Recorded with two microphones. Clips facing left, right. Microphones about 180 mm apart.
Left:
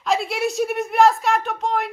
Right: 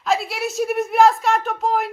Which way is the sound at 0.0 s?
Centre (ahead or behind).